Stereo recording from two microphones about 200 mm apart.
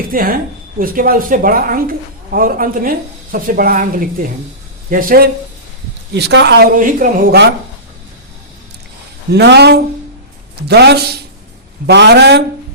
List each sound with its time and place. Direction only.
0.1 s a woman's voice: 45° right (ahead or behind)
6.1 s speech: 60° right (ahead or behind)
6.7 s a woman's voice: 45° right (ahead or behind)
9.3 s speech: 55° right (ahead or behind)